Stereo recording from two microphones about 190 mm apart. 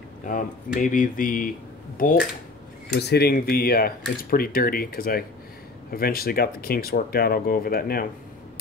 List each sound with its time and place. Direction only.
0.2 s speech: 45° left (ahead or behind)
2.9 s speech: 60° left (ahead or behind)